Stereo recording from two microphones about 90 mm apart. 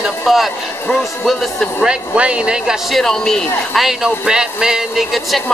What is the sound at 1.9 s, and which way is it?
Speech, 10° right (ahead or behind).